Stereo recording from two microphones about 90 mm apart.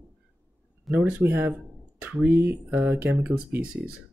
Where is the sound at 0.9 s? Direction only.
15° right (ahead or behind).